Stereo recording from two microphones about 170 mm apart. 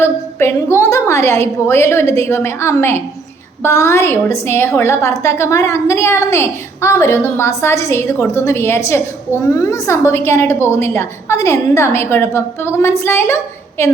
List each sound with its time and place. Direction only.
0.0 s a woman's voice: 15° left (ahead or behind)